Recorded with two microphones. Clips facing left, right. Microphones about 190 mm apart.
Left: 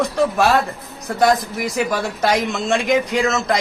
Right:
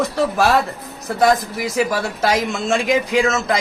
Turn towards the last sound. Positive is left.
turn(degrees=0)  # may be behind; listen again after turning